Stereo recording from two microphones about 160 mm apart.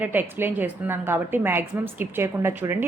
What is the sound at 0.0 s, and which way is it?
A woman's voice, 10° right (ahead or behind).